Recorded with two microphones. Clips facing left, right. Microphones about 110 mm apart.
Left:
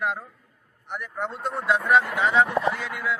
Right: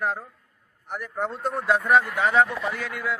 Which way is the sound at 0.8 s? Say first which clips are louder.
Right 2 dB; 40° right (ahead or behind).